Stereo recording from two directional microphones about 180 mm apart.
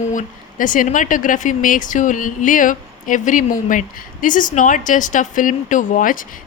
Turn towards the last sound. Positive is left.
turn(degrees=50)  # may be behind; listen again after turning